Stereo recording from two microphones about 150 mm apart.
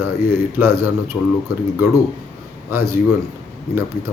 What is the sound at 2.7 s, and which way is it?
Speech, 15° right (ahead or behind).